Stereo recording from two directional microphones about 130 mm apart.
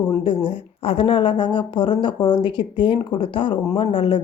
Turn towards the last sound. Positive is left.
turn(degrees=40)  # may be behind; listen again after turning